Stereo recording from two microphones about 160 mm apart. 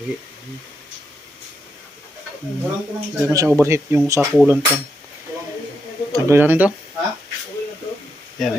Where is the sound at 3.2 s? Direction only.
20° right (ahead or behind).